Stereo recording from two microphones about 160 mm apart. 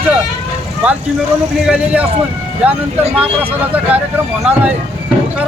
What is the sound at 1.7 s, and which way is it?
Speech, 10° right (ahead or behind).